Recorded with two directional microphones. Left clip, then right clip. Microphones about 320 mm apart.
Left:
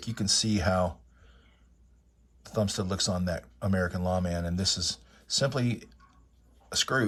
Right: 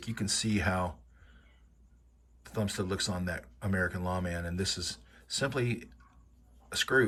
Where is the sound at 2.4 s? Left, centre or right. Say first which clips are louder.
Left 4 dB; centre.